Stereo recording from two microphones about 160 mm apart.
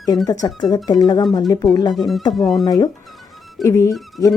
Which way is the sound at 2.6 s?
25° left (ahead or behind).